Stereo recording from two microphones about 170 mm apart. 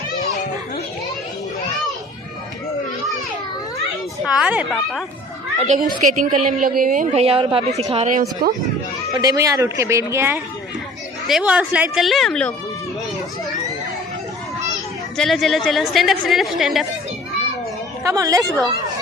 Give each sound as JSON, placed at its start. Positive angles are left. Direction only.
{"t": 4.2, "sound": "speech", "side_deg": -5}
{"t": 4.7, "sound": "a woman's voice", "side_deg": 5}
{"t": 5.6, "sound": "a woman's voice", "side_deg": -45}
{"t": 8.0, "sound": "speech", "side_deg": -55}
{"t": 9.1, "sound": "a woman's voice", "side_deg": -20}
{"t": 15.2, "sound": "a woman's voice", "side_deg": 0}
{"t": 18.0, "sound": "a woman's voice", "side_deg": -20}